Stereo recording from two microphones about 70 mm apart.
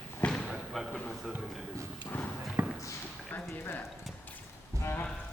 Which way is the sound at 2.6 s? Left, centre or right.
Right.